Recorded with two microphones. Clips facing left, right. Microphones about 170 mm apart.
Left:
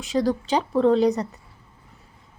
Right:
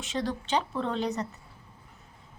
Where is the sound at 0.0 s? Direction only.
35° left (ahead or behind).